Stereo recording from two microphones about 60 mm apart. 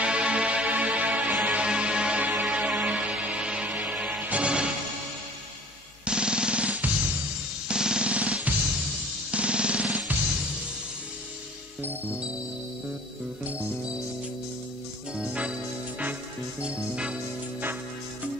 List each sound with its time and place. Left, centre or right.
0.0 s music: centre
6.0 s music: centre
10.1 s music: right
13.5 s music: right
15.1 s music: centre
16.6 s music: centre